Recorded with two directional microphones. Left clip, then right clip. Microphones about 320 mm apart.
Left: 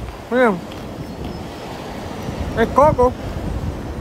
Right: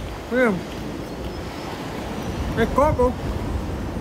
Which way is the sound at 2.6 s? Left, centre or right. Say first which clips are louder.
Left 4 dB; centre.